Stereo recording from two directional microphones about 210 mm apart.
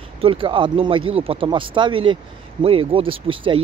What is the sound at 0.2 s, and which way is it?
Speech, 25° right (ahead or behind).